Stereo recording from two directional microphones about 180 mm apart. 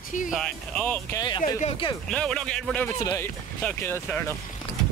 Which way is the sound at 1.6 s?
30° left (ahead or behind).